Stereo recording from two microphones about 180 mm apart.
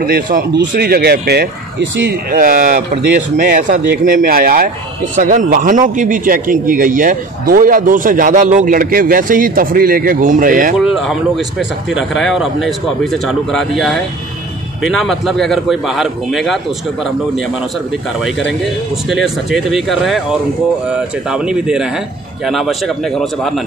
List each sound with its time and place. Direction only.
0.0 s speech: 55° right (ahead or behind)
2.3 s a man's voice: 50° right (ahead or behind)
10.8 s speech: centre (ahead or behind)
19.0 s speech: centre (ahead or behind)